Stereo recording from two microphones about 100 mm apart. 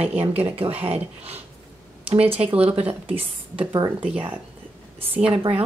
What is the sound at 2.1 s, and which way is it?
Speech, 75° right (ahead or behind).